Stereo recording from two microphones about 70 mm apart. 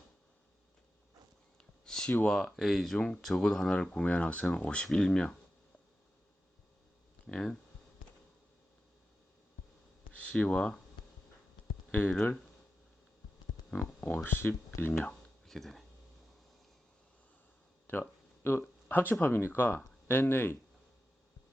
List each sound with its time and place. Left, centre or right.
1.8 s a sound: centre
2.2 s speech: centre
7.3 s speech: centre
10.2 s speech: centre
11.9 s speech: centre
14.3 s speech: left
15.4 s speech: centre
17.8 s a sound: left
18.9 s speech: left